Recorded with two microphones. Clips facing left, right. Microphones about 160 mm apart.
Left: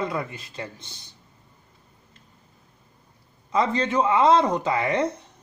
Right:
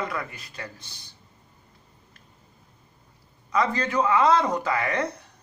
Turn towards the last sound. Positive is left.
turn(degrees=25)  # may be behind; listen again after turning